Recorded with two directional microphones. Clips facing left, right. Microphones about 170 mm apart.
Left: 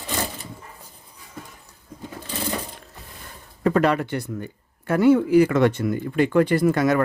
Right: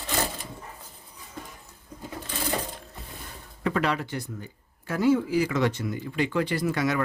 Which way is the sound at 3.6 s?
45° left (ahead or behind).